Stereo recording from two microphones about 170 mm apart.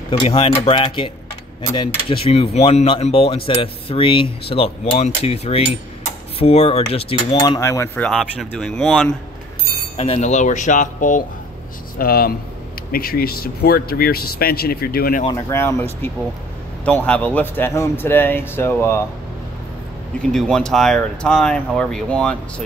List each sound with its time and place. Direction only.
0.2 s speech: 35° left (ahead or behind)
7.4 s speech: 20° left (ahead or behind); by 9.1 s 5° left (ahead or behind)
9.9 s speech: 40° left (ahead or behind)
12.0 s speech: 60° left (ahead or behind)
15.3 s speech: 15° left (ahead or behind)
20.2 s speech: 5° left (ahead or behind)